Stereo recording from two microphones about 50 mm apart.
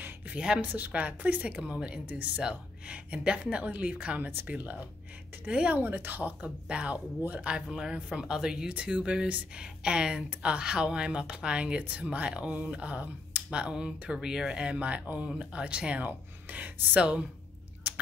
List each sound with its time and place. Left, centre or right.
0.6 s a woman's voice: right
5.5 s speech: right
5.8 s a woman's voice: right
6.2 s speech: right
16.0 s speech: right